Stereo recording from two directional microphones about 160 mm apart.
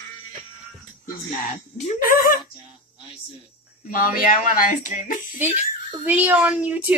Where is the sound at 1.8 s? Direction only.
60° left (ahead or behind).